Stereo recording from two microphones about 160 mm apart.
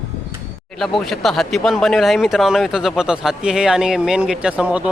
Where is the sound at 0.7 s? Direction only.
Centre (ahead or behind).